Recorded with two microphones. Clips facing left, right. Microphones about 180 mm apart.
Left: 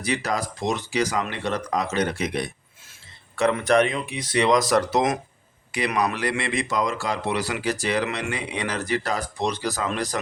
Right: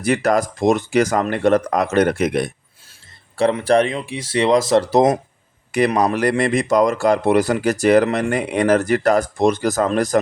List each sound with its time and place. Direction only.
0.0 s speech: 50° right (ahead or behind)
3.3 s speech: 30° right (ahead or behind)
6.1 s speech: 45° right (ahead or behind)